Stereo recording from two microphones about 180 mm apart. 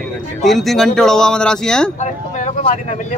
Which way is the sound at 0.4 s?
Centre (ahead or behind).